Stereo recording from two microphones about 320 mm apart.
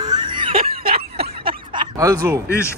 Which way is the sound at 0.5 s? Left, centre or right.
Right.